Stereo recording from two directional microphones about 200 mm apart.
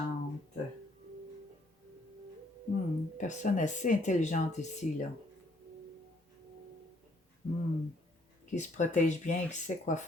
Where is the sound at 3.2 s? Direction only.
40° left (ahead or behind).